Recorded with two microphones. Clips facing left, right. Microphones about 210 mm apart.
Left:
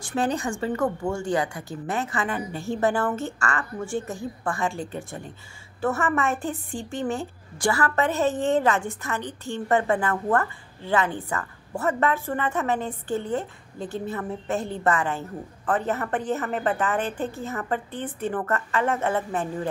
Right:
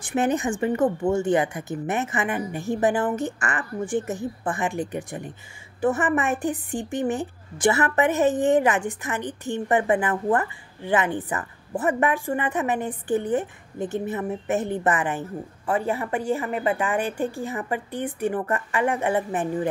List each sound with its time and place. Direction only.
0.0 s a woman's voice: 20° right (ahead or behind)